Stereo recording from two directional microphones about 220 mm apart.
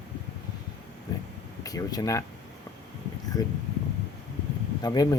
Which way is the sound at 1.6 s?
15° left (ahead or behind).